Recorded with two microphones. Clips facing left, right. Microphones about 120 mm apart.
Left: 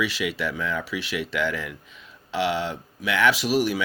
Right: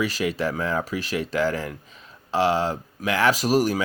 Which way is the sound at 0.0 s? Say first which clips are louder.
Right 2 dB; 40° right (ahead or behind).